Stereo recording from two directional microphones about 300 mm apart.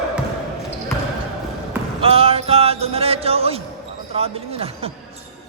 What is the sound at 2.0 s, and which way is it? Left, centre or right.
Music, centre.